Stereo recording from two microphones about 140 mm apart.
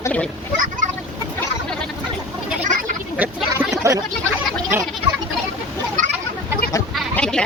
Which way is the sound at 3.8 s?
20° right (ahead or behind).